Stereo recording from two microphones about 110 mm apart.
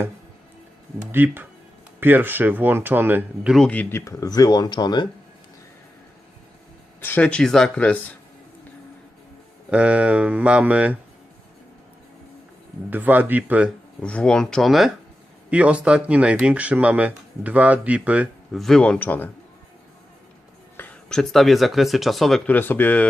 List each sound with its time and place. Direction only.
1.1 s speech: 20° right (ahead or behind)
3.7 s speech: 15° left (ahead or behind); by 5.0 s 40° left (ahead or behind)
7.0 s speech: 15° left (ahead or behind)
9.6 s speech: 10° right (ahead or behind)
12.9 s speech: 15° right (ahead or behind)
14.0 s speech: 10° left (ahead or behind)
15.4 s speech: 10° right (ahead or behind)
18.5 s speech: 5° left (ahead or behind)
21.1 s speech: 5° left (ahead or behind)
22.4 s speech: 15° left (ahead or behind)